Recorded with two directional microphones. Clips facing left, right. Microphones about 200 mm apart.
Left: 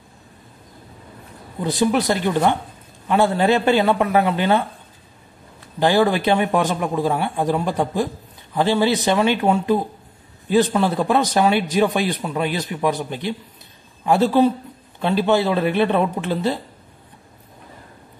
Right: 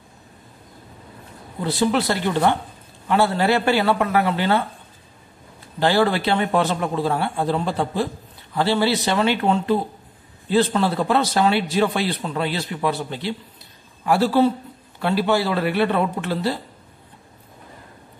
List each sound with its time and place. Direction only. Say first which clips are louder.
1.6 s a man's voice: left 1 dB; 15° left (ahead or behind)
5.8 s a man's voice: left 2 dB; 15° left (ahead or behind)